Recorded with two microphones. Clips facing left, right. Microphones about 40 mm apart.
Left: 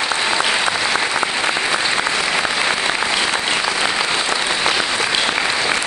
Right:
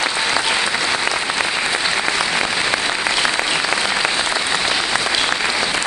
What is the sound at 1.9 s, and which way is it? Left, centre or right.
Applause, left.